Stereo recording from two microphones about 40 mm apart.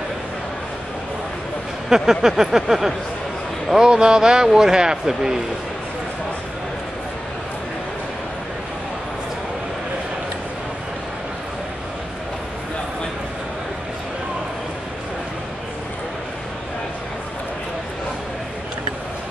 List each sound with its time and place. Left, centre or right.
1.9 s speech: centre